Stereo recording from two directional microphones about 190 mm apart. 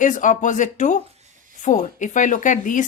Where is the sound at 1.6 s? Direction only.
40° left (ahead or behind).